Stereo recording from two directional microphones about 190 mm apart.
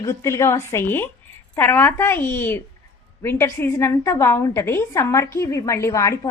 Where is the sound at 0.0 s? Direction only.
15° left (ahead or behind).